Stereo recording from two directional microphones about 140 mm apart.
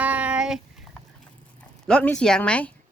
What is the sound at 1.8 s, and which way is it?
Speech, 5° left (ahead or behind).